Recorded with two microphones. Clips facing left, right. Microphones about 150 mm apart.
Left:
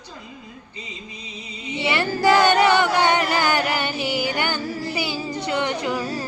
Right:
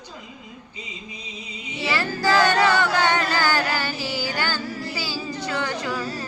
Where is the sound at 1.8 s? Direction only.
25° left (ahead or behind).